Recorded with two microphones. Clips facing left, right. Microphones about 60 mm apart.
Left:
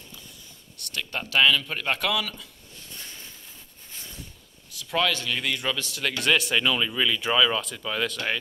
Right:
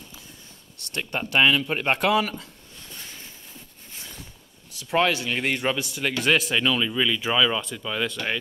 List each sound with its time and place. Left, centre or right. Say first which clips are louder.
1.1 s speech: right 1 dB; centre; by 2.5 s right
4.8 s a man's voice: right 3 dB; right
5.8 s speech: right 2 dB; centre